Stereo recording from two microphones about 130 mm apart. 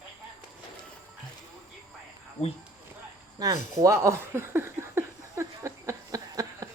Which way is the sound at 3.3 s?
30° right (ahead or behind).